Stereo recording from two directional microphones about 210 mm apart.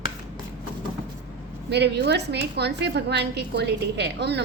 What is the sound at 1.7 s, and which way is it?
A woman's voice, 50° right (ahead or behind).